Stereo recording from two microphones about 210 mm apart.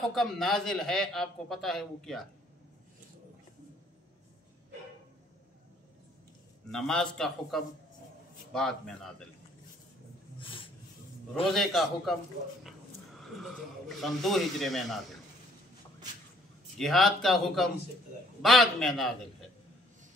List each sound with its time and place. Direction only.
0.1 s a man's voice: centre (ahead or behind)
6.7 s a man's voice: centre (ahead or behind)
10.4 s a sound: 25° left (ahead or behind)
11.5 s a man's voice: centre (ahead or behind)
13.2 s a man's voice: centre (ahead or behind)
16.7 s a man's voice: centre (ahead or behind)